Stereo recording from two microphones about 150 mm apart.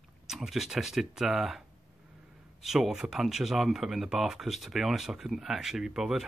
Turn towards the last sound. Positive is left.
turn(degrees=-5)  # may be behind; listen again after turning